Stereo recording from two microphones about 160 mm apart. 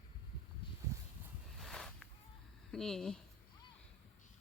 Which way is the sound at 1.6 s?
5° left (ahead or behind).